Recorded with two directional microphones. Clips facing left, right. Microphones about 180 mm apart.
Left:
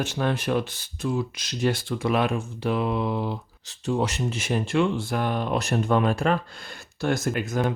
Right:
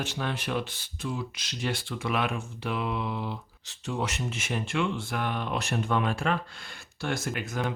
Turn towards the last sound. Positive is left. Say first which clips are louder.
# left 6 dB
turn(degrees=40)  # may be behind; listen again after turning